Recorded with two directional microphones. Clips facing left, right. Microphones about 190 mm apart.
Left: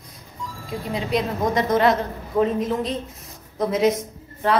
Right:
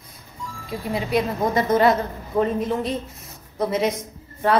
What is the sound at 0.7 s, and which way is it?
A woman's voice, 5° right (ahead or behind).